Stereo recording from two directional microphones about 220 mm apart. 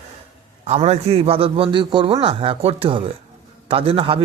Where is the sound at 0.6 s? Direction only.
30° right (ahead or behind).